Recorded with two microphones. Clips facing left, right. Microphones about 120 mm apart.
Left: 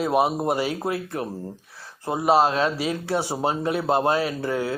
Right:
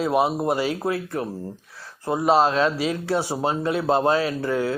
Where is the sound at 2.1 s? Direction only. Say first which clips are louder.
Right 1 dB; 20° left (ahead or behind).